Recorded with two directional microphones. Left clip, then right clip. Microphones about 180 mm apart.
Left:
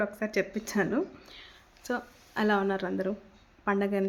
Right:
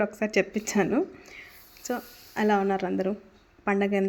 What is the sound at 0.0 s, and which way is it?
A woman's voice, 20° right (ahead or behind).